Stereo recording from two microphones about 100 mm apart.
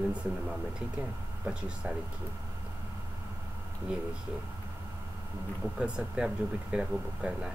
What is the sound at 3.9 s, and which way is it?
Speech, 10° right (ahead or behind).